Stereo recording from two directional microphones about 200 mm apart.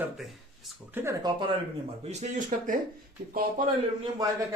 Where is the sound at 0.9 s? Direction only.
15° right (ahead or behind).